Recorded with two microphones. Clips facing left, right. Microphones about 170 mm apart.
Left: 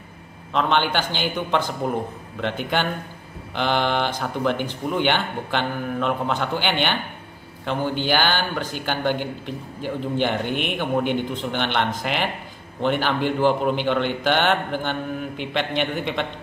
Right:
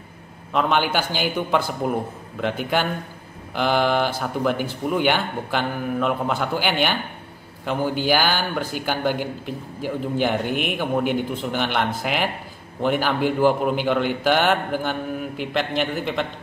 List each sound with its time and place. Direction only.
0.5 s speech: 5° right (ahead or behind)